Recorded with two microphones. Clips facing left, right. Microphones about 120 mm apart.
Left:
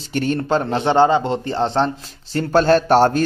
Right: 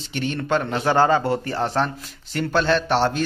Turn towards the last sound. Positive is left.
turn(degrees=45)  # may be behind; listen again after turning